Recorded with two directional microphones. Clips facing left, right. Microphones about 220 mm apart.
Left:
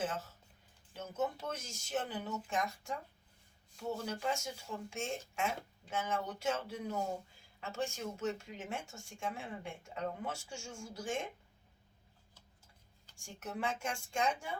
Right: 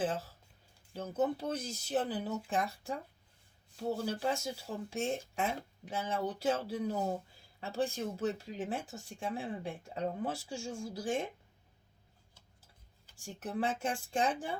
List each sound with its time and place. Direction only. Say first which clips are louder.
0.9 s speech: right 5 dB; 35° right (ahead or behind)
13.1 s speech: right 5 dB; 35° right (ahead or behind)